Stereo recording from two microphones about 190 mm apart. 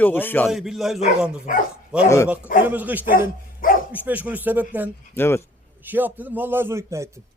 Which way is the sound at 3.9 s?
10° right (ahead or behind).